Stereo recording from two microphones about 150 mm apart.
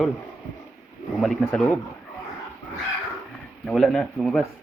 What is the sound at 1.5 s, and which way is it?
Speech, 10° left (ahead or behind).